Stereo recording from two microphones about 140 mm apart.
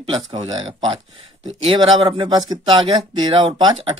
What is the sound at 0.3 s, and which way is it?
Speech, 35° right (ahead or behind).